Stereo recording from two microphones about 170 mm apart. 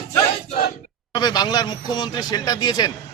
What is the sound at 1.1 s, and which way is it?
Speech, 25° left (ahead or behind).